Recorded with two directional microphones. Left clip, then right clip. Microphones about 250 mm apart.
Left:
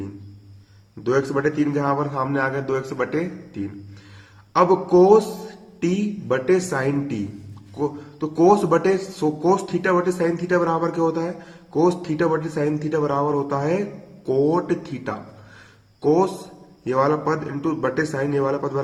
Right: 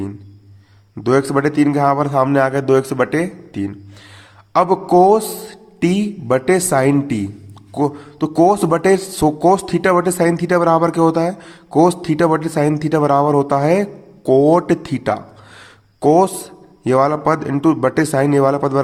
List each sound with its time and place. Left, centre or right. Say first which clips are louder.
1.0 s a man's voice: right 5 dB; right